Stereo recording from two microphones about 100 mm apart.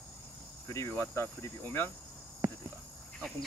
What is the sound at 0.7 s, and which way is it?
Speech, 30° left (ahead or behind).